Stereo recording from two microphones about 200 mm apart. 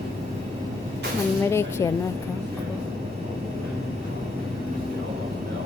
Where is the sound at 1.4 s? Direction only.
15° left (ahead or behind).